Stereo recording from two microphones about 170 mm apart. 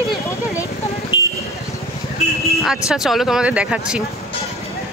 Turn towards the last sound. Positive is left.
turn(degrees=-5)  # may be behind; listen again after turning